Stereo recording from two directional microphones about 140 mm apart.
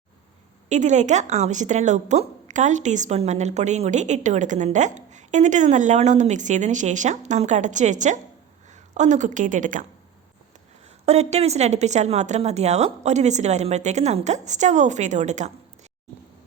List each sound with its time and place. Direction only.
0.7 s a woman's voice: 60° right (ahead or behind)
11.0 s speech: 50° right (ahead or behind)